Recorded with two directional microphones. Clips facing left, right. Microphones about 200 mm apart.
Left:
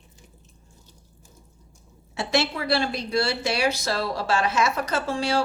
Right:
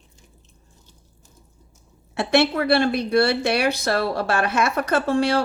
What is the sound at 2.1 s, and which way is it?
A woman's voice, 60° right (ahead or behind).